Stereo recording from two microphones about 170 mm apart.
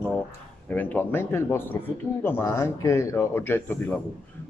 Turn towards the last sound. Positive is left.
turn(degrees=10)  # may be behind; listen again after turning